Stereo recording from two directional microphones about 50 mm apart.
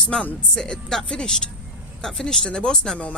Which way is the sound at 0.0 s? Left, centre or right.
Centre.